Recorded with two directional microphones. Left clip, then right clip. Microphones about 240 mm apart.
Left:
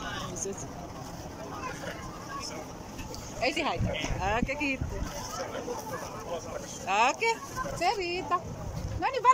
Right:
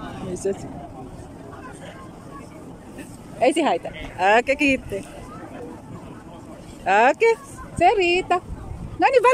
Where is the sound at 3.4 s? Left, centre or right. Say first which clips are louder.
Right 11 dB; right.